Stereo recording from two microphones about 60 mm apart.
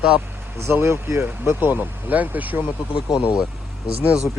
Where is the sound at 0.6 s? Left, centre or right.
Right.